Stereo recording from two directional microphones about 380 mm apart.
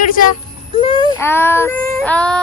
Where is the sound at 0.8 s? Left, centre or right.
Centre.